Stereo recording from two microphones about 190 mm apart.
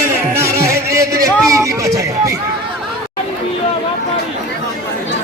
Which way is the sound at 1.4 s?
15° right (ahead or behind).